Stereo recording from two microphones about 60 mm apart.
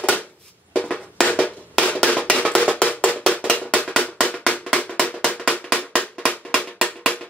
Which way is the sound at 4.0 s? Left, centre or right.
Left.